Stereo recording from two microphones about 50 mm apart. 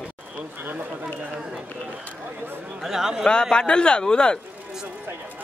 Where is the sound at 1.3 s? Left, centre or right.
Centre.